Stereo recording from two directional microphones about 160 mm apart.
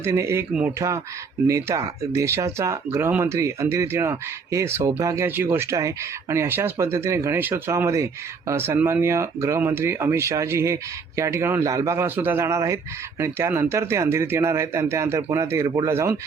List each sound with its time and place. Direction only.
0.0 s speech: 15° right (ahead or behind)
1.5 s speech: 20° right (ahead or behind)